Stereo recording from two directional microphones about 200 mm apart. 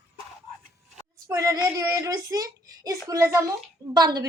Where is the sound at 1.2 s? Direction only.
15° right (ahead or behind).